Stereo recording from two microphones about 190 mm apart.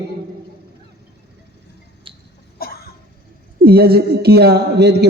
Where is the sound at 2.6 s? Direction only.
55° left (ahead or behind).